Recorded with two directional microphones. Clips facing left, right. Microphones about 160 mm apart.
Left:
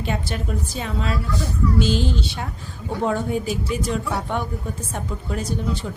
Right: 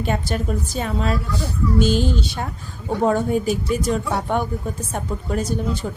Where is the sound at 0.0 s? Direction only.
45° right (ahead or behind).